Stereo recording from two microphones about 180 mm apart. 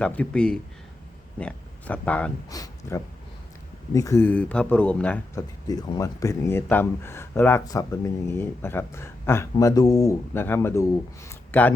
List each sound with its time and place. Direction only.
0.0 s speech: 5° left (ahead or behind)
2.5 s speech: 20° left (ahead or behind)